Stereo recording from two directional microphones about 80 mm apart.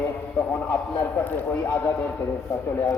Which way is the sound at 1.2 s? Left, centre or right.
Left.